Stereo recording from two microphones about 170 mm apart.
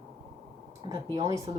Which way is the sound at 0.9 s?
25° right (ahead or behind).